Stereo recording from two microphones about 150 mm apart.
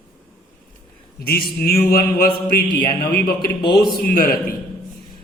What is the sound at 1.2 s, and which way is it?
Speech, 90° left.